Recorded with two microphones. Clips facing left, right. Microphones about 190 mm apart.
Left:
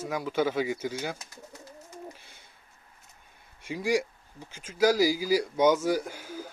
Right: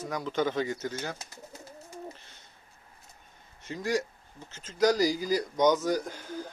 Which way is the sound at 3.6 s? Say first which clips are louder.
Left 3 dB; 10° left (ahead or behind).